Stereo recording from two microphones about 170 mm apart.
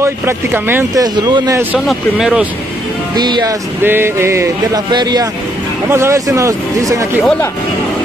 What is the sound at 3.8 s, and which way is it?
Speech, 15° right (ahead or behind).